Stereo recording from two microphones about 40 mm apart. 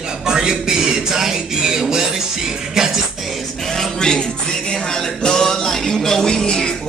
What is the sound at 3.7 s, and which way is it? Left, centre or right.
Music, centre.